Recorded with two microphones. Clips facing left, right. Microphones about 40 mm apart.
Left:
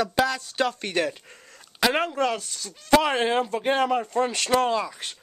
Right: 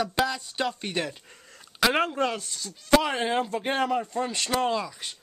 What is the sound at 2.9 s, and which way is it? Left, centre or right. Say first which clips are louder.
Speech: left 2 dB; centre.